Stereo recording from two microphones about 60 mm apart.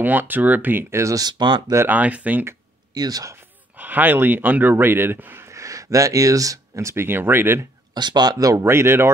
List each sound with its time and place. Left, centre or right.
0.0 s speech: right
0.9 s speech: right
1.9 s speech: right
2.9 s speech: right
3.7 s speech: right
5.5 s speech: right
7.1 s speech: right
8.3 s speech: right
8.6 s speech: right